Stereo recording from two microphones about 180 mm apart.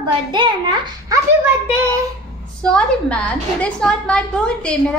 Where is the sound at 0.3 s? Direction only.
25° right (ahead or behind).